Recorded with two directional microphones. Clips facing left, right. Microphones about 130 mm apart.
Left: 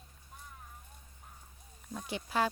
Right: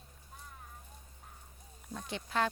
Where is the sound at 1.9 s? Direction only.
5° left (ahead or behind).